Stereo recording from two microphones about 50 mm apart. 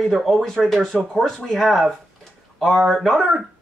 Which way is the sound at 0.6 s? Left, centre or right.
Centre.